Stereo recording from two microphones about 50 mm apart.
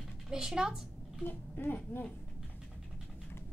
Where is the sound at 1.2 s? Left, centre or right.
Left.